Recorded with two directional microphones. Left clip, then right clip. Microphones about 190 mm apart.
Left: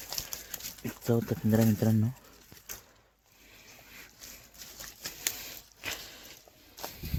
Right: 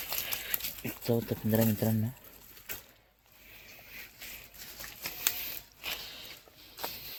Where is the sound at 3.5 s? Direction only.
45° left (ahead or behind).